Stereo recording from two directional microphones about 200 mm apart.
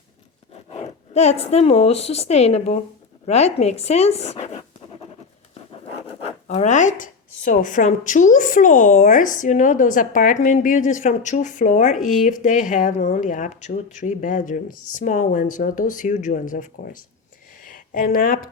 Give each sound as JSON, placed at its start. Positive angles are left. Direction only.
{"t": 0.5, "sound": "speech", "side_deg": 30}
{"t": 6.0, "sound": "speech", "side_deg": 30}
{"t": 11.9, "sound": "speech", "side_deg": 0}
{"t": 12.2, "sound": "speech", "side_deg": 40}
{"t": 17.6, "sound": "a sound", "side_deg": 45}